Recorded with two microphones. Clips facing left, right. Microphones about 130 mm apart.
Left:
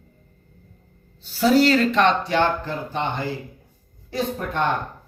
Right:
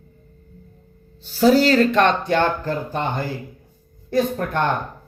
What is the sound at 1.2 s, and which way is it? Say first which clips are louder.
A man's voice: right 2 dB; 40° right (ahead or behind).